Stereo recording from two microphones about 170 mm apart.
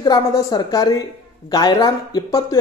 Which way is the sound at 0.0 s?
20° left (ahead or behind).